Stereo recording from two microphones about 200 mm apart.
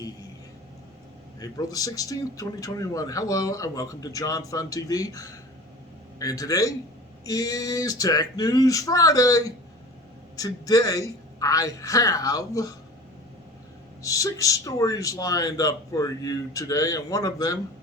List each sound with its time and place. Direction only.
1.4 s speech: 20° left (ahead or behind)
14.0 s speech: 15° left (ahead or behind)